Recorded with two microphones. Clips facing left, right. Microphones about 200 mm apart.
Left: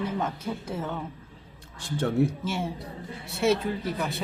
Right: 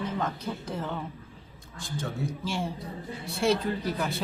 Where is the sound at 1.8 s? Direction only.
65° left (ahead or behind).